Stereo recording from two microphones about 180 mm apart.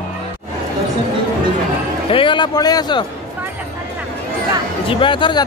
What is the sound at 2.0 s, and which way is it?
Speech, 30° left (ahead or behind).